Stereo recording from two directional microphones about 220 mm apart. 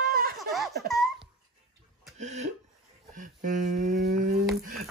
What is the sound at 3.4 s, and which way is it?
Humming, 35° right (ahead or behind).